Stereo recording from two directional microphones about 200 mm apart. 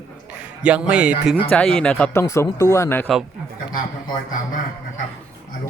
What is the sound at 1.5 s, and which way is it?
Speech, 5° left (ahead or behind).